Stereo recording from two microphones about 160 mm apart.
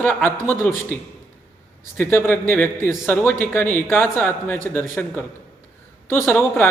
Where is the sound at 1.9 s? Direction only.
10° left (ahead or behind).